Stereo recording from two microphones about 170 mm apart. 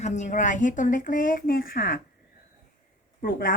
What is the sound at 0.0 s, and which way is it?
Speech, 45° left (ahead or behind).